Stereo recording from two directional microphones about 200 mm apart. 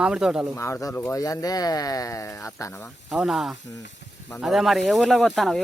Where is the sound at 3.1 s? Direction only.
Centre (ahead or behind).